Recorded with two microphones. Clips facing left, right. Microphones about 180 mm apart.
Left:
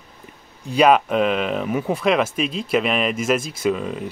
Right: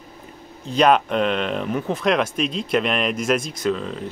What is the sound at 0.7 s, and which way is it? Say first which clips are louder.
Speech: left 1 dB; 5° left (ahead or behind).